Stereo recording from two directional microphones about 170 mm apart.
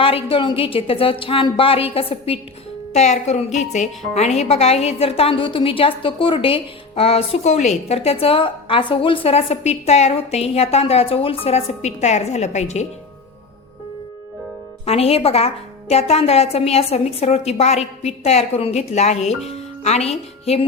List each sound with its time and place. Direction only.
0.0 s a woman's voice: 30° left (ahead or behind)
14.8 s a woman's voice: 35° left (ahead or behind)
19.5 s music: 40° left (ahead or behind)